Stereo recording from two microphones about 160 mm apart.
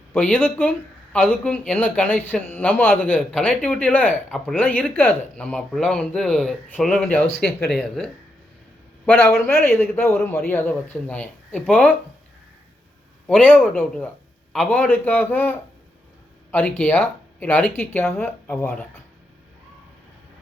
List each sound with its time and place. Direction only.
0.1 s a man's voice: 10° left (ahead or behind)
9.5 s a man's voice: 15° left (ahead or behind)
13.2 s a man's voice: 5° left (ahead or behind)